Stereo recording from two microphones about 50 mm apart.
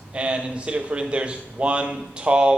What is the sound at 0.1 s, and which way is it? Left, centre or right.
A man's voice, right.